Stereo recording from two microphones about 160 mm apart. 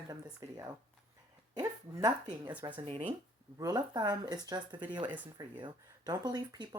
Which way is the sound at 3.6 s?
25° right (ahead or behind).